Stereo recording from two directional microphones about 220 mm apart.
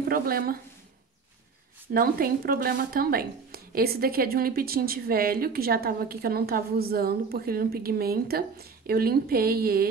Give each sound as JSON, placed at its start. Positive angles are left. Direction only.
{"t": 0.1, "sound": "speech", "side_deg": -40}
{"t": 2.0, "sound": "a woman's voice", "side_deg": -40}